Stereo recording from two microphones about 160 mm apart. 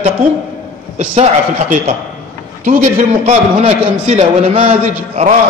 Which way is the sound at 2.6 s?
50° right (ahead or behind).